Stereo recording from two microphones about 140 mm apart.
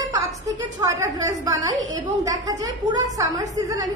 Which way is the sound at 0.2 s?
25° right (ahead or behind).